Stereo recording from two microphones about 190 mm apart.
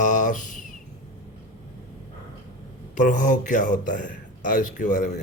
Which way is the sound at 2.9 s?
40° left (ahead or behind).